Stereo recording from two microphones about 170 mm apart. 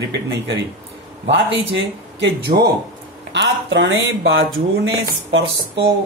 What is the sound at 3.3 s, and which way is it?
A man's voice, 90° right.